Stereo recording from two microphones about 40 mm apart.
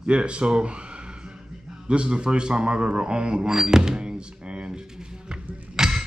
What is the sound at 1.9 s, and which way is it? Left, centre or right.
A man's voice, right.